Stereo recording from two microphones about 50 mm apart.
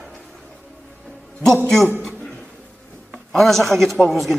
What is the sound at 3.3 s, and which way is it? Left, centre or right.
Speech, centre.